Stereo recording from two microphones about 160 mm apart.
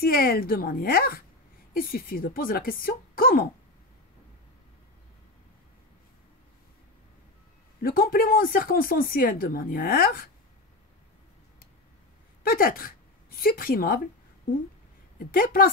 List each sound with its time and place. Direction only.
0.0 s speech: 70° left (ahead or behind)
7.8 s speech: 65° left (ahead or behind)
12.4 s speech: 65° left (ahead or behind)
15.1 s speech: 65° left (ahead or behind)